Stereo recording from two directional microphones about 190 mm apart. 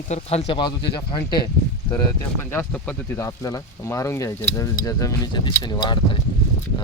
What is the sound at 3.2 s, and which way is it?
Speech, 20° left (ahead or behind).